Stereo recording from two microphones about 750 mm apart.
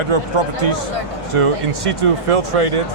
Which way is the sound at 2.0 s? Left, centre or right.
Right.